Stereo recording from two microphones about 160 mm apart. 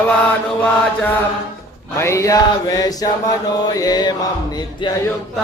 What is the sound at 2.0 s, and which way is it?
Mantra, 15° left (ahead or behind).